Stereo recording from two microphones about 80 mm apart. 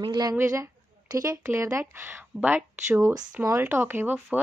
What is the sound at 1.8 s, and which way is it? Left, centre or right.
Speech, centre.